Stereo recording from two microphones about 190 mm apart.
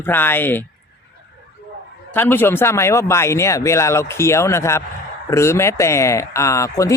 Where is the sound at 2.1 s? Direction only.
10° left (ahead or behind).